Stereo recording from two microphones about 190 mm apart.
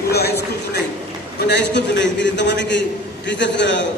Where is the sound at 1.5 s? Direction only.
65° left (ahead or behind).